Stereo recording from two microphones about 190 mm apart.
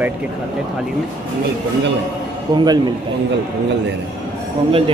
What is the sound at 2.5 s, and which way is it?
Speech, 20° right (ahead or behind).